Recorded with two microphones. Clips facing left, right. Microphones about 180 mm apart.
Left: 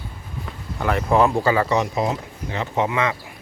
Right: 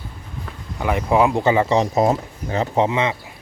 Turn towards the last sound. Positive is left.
turn(degrees=-25)  # may be behind; listen again after turning